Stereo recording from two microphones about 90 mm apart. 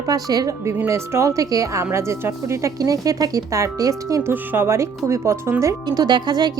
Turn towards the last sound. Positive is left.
turn(degrees=-55)  # may be behind; listen again after turning